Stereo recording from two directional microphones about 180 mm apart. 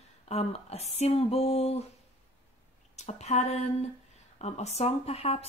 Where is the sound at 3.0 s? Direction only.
40° left (ahead or behind).